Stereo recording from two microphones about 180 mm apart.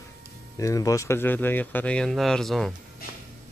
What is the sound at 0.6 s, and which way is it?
Speech, 20° left (ahead or behind).